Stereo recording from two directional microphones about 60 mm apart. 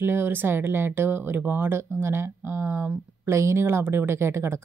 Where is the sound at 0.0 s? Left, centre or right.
Right.